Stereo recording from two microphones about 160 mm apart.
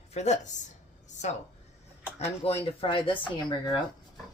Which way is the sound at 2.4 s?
40° left (ahead or behind).